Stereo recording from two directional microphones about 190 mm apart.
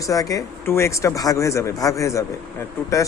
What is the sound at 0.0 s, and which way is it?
Speech, 15° left (ahead or behind).